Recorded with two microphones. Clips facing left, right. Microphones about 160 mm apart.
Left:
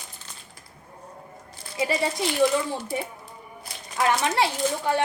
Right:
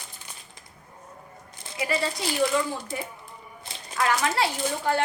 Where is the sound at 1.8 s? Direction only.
25° left (ahead or behind).